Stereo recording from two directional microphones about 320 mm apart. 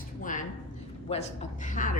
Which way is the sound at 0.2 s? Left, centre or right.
Left.